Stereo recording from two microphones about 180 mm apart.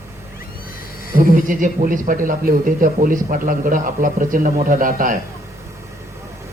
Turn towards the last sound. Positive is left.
turn(degrees=-50)  # may be behind; listen again after turning